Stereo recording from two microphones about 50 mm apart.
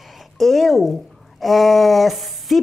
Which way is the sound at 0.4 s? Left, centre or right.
Centre.